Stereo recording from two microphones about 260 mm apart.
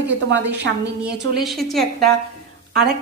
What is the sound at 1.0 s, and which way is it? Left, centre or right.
A woman's voice, centre.